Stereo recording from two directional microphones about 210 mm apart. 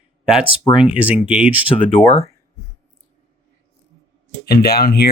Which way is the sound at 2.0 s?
30° left (ahead or behind).